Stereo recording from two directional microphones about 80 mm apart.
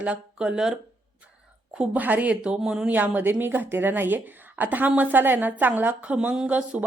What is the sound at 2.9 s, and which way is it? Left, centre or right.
Speech, right.